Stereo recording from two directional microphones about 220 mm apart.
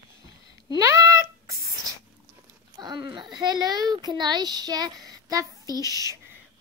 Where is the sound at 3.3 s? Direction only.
20° right (ahead or behind).